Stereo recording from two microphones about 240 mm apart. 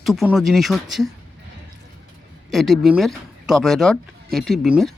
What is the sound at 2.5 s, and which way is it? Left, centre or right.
Speech, centre.